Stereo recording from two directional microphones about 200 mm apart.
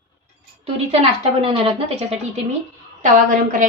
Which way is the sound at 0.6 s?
30° right (ahead or behind).